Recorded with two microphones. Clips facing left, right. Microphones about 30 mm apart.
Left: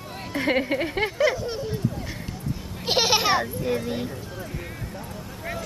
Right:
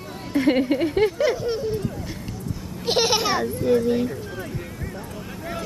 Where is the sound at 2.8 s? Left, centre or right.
Centre.